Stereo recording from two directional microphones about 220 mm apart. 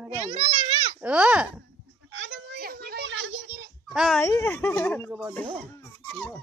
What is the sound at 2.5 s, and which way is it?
Children playing, 45° right (ahead or behind).